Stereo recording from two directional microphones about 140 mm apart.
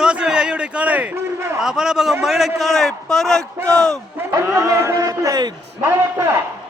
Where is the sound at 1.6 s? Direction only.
5° right (ahead or behind).